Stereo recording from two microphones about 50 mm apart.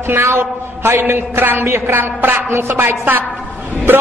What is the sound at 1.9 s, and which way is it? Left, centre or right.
A man's voice, right.